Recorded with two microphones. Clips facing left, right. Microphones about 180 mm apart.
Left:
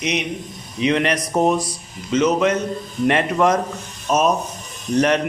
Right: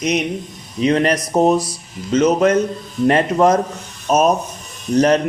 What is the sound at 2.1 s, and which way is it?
Speech, 45° right (ahead or behind).